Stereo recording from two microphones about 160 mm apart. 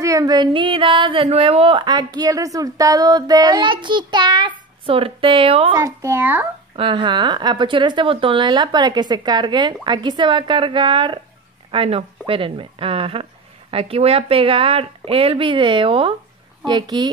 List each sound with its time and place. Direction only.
0.0 s speech: 20° right (ahead or behind)
5.8 s a child's voice: 15° right (ahead or behind)
6.8 s speech: 30° right (ahead or behind)